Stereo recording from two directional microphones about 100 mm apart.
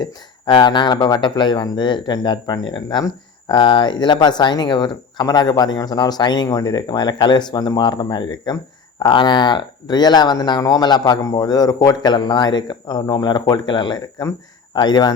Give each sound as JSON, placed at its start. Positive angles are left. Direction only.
{"t": 0.0, "sound": "speech", "side_deg": 50}